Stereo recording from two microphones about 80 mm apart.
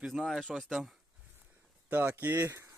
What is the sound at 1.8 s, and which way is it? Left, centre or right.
Speech, right.